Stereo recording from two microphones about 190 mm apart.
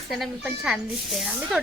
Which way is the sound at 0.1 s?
Centre (ahead or behind).